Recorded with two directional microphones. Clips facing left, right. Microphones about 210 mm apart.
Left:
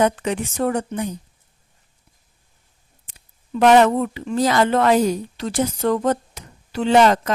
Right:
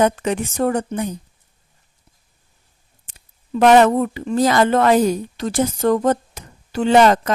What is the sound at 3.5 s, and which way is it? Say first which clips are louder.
Speech: right 2 dB; 45° right (ahead or behind).